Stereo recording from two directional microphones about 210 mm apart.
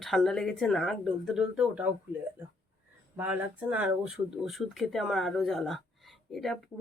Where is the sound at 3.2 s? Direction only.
5° right (ahead or behind).